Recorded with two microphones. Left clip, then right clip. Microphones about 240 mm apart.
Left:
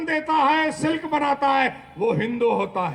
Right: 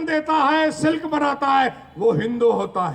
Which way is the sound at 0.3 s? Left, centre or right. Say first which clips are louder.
Right 1 dB; right.